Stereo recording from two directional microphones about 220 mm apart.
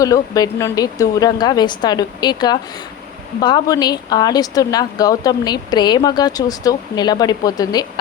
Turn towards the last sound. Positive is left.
turn(degrees=15)  # may be behind; listen again after turning